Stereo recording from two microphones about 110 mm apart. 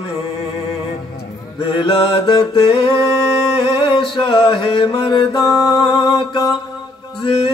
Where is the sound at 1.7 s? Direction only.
55° left (ahead or behind).